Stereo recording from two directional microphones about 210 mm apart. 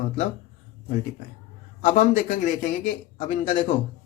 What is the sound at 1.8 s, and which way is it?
A man's voice, 35° left (ahead or behind).